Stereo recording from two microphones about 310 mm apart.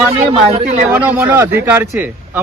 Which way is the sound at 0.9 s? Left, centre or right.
Centre.